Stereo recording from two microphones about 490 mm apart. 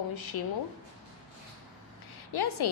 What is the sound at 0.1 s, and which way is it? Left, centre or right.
Speech, left.